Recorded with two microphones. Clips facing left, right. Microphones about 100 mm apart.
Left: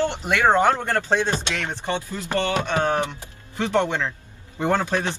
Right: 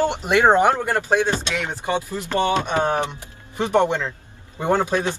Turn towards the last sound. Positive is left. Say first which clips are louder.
# right 2 dB
turn(degrees=-15)  # may be behind; listen again after turning